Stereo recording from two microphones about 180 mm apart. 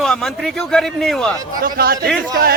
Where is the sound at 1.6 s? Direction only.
55° right (ahead or behind).